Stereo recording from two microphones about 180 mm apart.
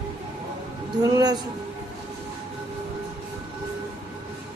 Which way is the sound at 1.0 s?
20° right (ahead or behind).